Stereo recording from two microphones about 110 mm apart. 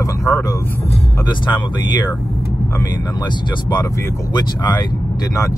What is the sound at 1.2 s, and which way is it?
Speech, 45° left (ahead or behind).